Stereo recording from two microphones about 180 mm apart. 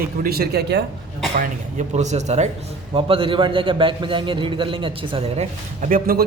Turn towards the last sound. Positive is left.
turn(degrees=-55)  # may be behind; listen again after turning